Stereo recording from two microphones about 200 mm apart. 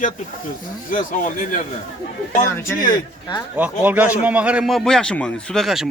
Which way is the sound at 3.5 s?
10° right (ahead or behind).